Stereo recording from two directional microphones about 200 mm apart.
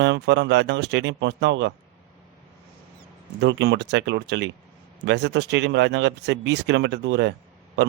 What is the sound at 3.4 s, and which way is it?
A man's voice, 60° right (ahead or behind).